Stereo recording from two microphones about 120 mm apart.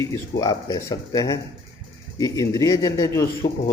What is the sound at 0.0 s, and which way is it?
Speech, 30° left (ahead or behind).